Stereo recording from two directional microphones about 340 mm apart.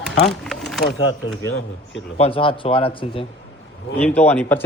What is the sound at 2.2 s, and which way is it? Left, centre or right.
A man's voice, centre.